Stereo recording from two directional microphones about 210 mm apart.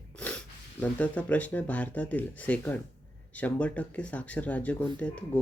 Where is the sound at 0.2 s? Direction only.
5° left (ahead or behind).